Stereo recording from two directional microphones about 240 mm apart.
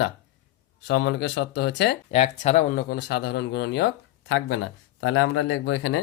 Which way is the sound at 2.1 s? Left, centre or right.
Left.